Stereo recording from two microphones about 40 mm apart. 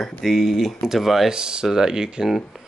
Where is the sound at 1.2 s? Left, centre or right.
Centre.